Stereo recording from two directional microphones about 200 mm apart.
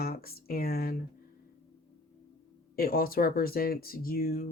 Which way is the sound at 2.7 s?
45° left (ahead or behind).